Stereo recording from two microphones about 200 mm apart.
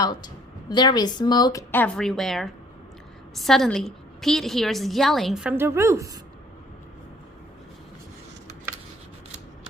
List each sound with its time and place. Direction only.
0.0 s a woman's voice: 20° left (ahead or behind); by 6.1 s 15° right (ahead or behind)